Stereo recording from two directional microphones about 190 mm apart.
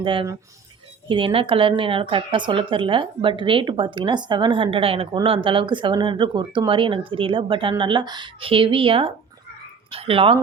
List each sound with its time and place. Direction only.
0.0 s a woman's voice: 25° right (ahead or behind)